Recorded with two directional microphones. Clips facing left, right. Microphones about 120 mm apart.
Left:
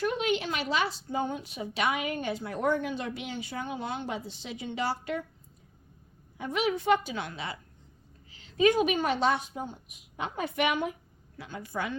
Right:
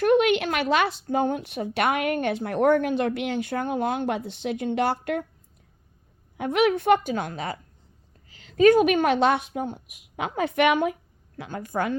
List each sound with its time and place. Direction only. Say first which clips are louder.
0.0 s a woman's voice: right 9 dB; 65° right (ahead or behind)
6.3 s a woman's voice: right 8 dB; 65° right (ahead or behind); by 7.6 s 45° right (ahead or behind)
8.6 s a woman's voice: right 7 dB; 55° right (ahead or behind)
11.3 s a woman's voice: right 7 dB; 50° right (ahead or behind)